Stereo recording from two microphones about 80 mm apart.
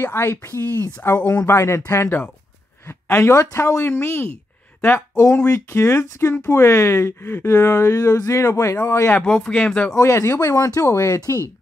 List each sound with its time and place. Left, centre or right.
0.0 s speech: left
5.3 s speech: left
9.1 s speech: centre
9.9 s speech: left